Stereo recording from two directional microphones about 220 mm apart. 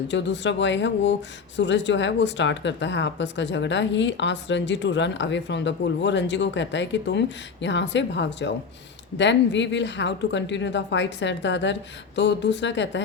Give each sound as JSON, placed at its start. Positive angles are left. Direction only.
{"t": 0.1, "sound": "speech", "side_deg": 55}